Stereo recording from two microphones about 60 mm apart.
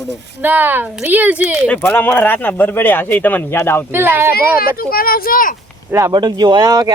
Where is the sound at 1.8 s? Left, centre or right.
Left.